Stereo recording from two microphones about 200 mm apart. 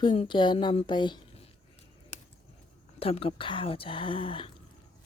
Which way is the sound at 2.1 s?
35° left (ahead or behind).